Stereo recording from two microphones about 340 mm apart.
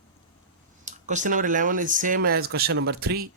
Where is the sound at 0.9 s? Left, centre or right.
Right.